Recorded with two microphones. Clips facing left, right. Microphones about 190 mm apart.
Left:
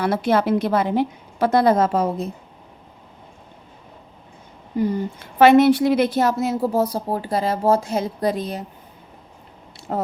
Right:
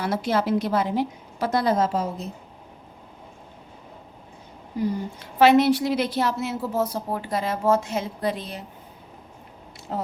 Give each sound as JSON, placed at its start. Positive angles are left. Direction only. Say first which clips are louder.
{"t": 0.0, "sound": "a woman's voice", "louder": "left 5 dB", "side_deg": 60}
{"t": 4.8, "sound": "a woman's voice", "louder": "left 4 dB", "side_deg": 50}
{"t": 9.9, "sound": "a woman's voice", "louder": "left 5 dB", "side_deg": 55}